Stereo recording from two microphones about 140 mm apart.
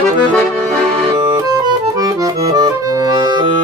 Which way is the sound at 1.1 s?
30° right (ahead or behind).